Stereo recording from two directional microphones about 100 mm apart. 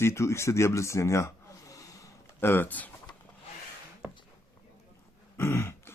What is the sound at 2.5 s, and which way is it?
Speech, 20° left (ahead or behind).